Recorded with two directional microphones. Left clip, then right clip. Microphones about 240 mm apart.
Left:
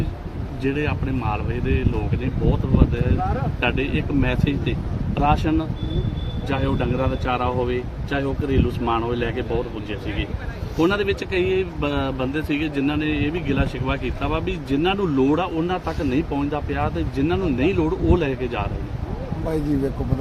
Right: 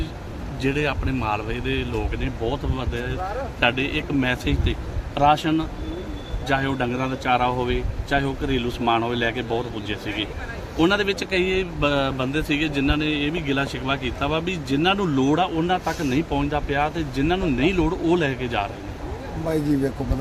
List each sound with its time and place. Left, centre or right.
0.6 s speech: centre
10.8 s speech: centre